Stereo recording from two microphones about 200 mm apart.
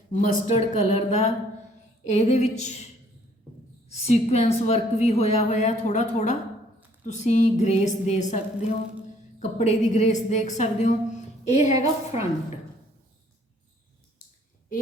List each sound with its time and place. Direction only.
0.1 s a woman's voice: 35° left (ahead or behind)
3.8 s a woman's voice: 30° left (ahead or behind)
9.4 s a woman's voice: 35° left (ahead or behind)